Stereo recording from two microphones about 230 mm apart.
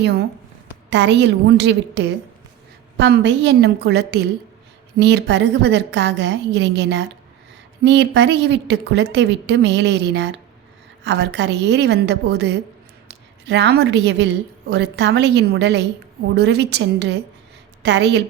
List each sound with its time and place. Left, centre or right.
0.0 s a woman's voice: right